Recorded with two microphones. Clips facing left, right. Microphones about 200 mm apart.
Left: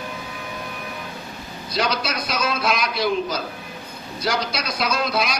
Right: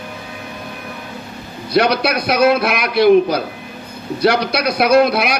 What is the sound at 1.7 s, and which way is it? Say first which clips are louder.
A man's voice: right 9 dB; 60° right (ahead or behind).